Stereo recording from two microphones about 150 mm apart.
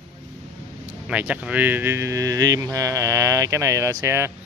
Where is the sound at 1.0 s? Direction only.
10° right (ahead or behind).